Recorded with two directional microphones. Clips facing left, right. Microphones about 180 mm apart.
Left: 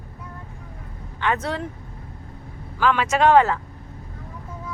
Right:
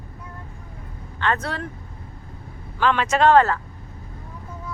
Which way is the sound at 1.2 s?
15° left (ahead or behind).